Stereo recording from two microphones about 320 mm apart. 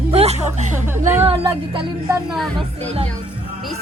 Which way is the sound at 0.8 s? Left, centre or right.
Centre.